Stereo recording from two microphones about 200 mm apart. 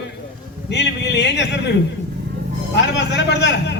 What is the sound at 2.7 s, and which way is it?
Speech, 60° left (ahead or behind).